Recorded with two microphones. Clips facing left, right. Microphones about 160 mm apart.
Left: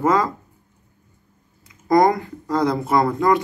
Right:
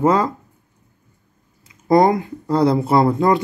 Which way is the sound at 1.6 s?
25° right (ahead or behind).